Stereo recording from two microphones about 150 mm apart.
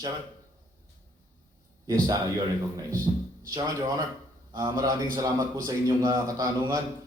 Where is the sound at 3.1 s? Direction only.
30° right (ahead or behind).